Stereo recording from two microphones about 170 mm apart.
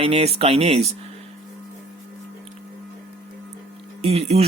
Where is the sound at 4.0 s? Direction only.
40° right (ahead or behind).